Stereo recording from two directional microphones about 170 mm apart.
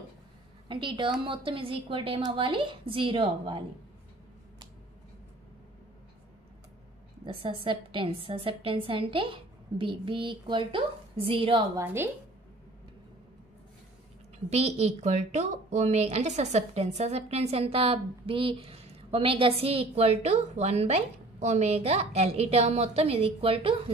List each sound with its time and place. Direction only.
0.7 s a woman's voice: 30° right (ahead or behind)
7.2 s a woman's voice: 35° right (ahead or behind)
11.7 s a woman's voice: 15° right (ahead or behind)
14.5 s a woman's voice: 40° right (ahead or behind)